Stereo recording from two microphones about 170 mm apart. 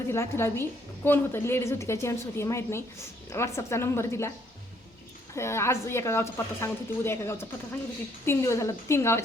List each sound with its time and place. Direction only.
0.1 s a woman's voice: 15° left (ahead or behind)
5.3 s a woman's voice: 15° left (ahead or behind)